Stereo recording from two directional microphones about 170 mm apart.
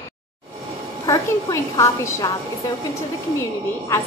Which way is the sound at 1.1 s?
20° left (ahead or behind).